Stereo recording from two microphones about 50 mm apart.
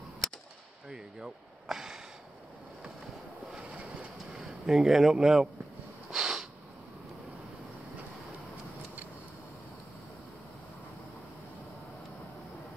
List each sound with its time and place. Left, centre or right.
0.8 s snort: centre
3.5 s train: right
4.3 s speech: centre
6.1 s a sound: centre